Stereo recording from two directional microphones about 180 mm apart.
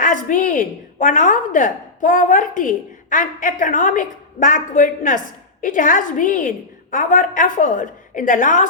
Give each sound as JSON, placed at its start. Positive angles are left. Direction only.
{"t": 0.0, "sound": "speech", "side_deg": 45}